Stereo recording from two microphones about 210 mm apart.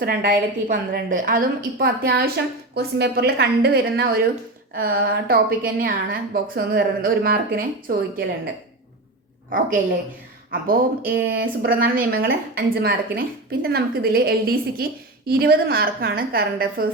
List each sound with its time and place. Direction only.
0.0 s a woman's voice: 45° right (ahead or behind)
10.5 s a woman's voice: 45° right (ahead or behind)